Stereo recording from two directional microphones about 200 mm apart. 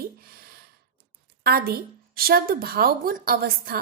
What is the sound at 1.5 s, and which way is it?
Speech, 50° right (ahead or behind).